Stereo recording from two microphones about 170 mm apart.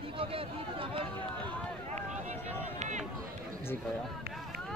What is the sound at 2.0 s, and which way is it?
Run, 40° right (ahead or behind).